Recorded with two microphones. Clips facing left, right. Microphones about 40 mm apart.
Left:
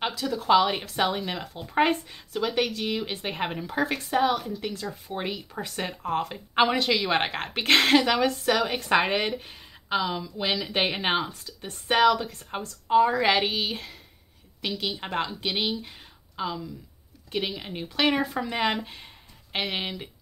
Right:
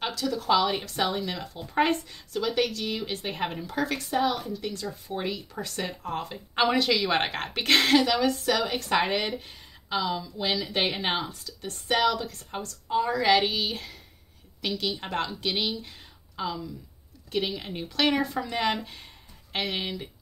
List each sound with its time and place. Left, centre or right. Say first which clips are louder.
0.2 s a woman's voice: left 3 dB; left
1.6 s a woman's voice: left 1 dB; centre
6.7 s a woman's voice: even; centre
8.5 s a woman's voice: left 2 dB; centre
9.0 s speech: left 1 dB; centre
9.4 s speech: left 2 dB; left
9.8 s a woman's voice: left 1 dB; left
12.8 s speech: left 6 dB; left
13.2 s a woman's voice: right 1 dB; left
17.6 s speech: left 1 dB; centre